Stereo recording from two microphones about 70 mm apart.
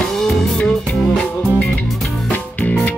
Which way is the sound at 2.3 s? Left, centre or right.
Left.